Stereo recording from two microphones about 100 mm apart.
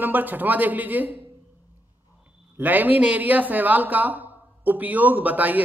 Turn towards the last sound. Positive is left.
turn(degrees=-15)  # may be behind; listen again after turning